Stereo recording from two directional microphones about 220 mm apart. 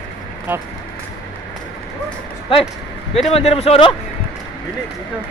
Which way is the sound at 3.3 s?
25° left (ahead or behind).